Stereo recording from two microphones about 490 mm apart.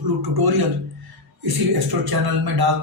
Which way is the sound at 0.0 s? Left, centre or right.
Right.